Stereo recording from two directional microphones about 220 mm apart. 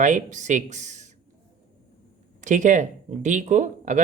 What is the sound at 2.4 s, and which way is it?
Speech, 35° right (ahead or behind).